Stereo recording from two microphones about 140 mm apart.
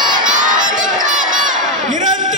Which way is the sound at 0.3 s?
65° right (ahead or behind).